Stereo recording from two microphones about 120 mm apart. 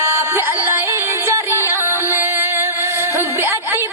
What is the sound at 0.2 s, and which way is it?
Music, 20° right (ahead or behind).